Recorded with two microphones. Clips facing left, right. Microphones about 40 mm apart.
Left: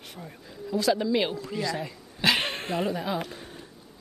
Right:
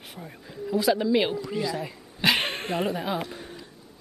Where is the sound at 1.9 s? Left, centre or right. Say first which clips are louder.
Even; centre.